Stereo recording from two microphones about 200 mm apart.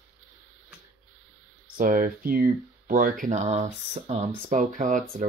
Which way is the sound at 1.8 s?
40° right (ahead or behind).